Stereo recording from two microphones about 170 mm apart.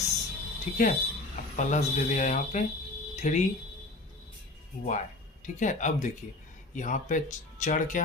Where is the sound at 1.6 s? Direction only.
45° left (ahead or behind).